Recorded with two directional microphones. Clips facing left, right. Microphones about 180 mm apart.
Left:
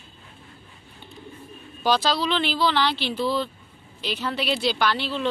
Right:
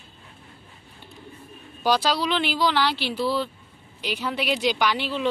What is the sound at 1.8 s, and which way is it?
Speech, 10° right (ahead or behind).